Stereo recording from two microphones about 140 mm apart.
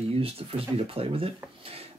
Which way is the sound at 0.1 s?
45° right (ahead or behind).